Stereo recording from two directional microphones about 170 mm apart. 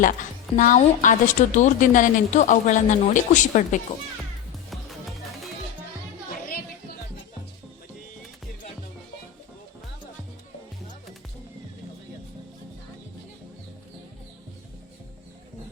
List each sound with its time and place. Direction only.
0.5 s a woman's voice: 50° left (ahead or behind)
4.7 s music: centre (ahead or behind)